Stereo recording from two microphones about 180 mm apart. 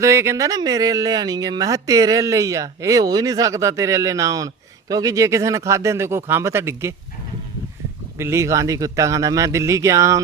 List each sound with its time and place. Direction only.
0.0 s speech: 15° right (ahead or behind)
8.2 s speech: 15° right (ahead or behind)